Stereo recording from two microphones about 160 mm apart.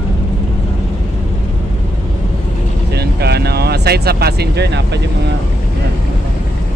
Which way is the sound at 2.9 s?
90° right.